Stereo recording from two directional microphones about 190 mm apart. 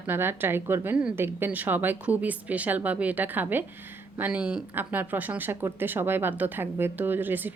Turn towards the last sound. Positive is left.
turn(degrees=-10)  # may be behind; listen again after turning